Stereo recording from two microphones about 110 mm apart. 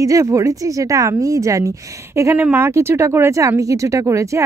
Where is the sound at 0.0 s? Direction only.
30° right (ahead or behind).